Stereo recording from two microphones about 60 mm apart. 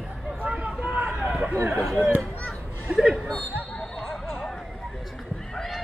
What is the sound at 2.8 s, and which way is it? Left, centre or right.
Speech, centre.